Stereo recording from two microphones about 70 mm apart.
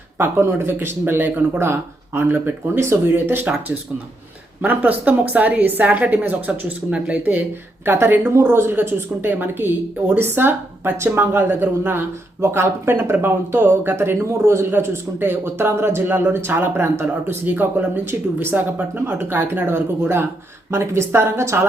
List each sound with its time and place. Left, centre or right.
0.2 s speech: right
4.6 s a woman's voice: right
7.9 s speech: right
8.3 s speech: right